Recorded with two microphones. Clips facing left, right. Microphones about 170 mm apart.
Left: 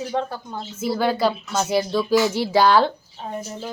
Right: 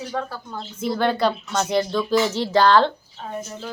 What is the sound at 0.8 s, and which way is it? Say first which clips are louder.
Speech: even; 5° left (ahead or behind).